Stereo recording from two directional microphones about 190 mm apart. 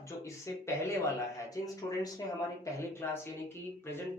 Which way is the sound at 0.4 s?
15° left (ahead or behind).